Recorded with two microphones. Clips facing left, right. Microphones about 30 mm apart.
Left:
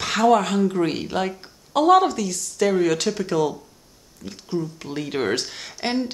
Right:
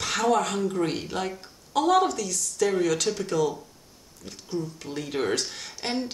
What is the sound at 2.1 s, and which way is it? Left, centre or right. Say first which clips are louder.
Speech: left 3 dB; left.